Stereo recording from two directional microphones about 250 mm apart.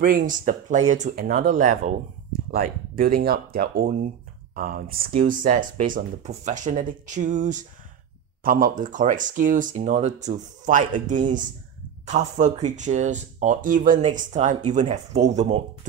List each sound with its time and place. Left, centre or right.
0.5 s speech: right